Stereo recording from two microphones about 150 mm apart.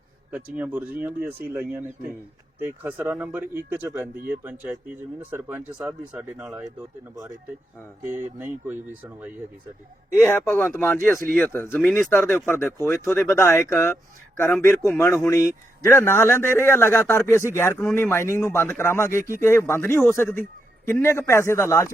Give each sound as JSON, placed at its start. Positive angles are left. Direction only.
{"t": 0.5, "sound": "speech", "side_deg": -10}
{"t": 2.6, "sound": "speech", "side_deg": -15}
{"t": 8.6, "sound": "speech", "side_deg": -10}
{"t": 10.2, "sound": "speech", "side_deg": 15}